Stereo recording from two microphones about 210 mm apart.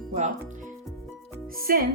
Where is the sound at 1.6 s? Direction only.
45° right (ahead or behind).